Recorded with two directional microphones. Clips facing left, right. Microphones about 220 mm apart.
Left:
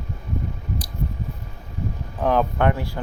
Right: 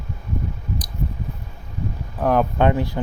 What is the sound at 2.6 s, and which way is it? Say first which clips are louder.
Speech: right 3 dB; 20° right (ahead or behind).